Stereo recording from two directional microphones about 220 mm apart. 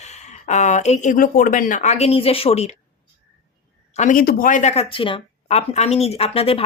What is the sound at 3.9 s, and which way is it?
Speech, 35° left (ahead or behind).